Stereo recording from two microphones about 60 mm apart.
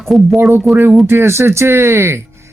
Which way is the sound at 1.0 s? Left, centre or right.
Right.